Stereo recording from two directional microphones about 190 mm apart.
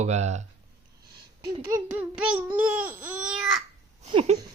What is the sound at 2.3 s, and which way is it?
Babbling, 10° right (ahead or behind).